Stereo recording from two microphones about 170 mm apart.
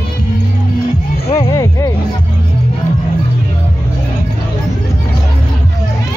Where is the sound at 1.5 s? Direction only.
20° left (ahead or behind).